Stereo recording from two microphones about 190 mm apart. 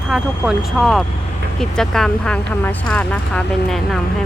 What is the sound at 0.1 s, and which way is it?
Speech, centre (ahead or behind).